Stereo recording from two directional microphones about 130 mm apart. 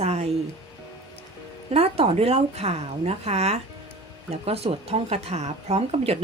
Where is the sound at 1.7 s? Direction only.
50° right (ahead or behind).